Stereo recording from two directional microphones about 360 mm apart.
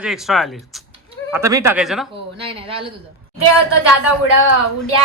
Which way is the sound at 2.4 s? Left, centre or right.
Centre.